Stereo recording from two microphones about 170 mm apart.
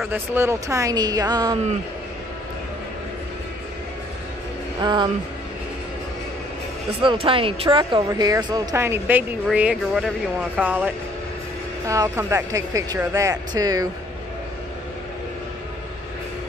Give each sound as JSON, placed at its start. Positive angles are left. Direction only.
{"t": 0.1, "sound": "speech", "side_deg": -10}
{"t": 4.7, "sound": "speech", "side_deg": -25}
{"t": 7.0, "sound": "speech", "side_deg": -30}